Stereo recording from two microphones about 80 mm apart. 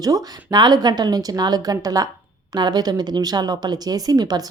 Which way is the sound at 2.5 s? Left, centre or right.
Right.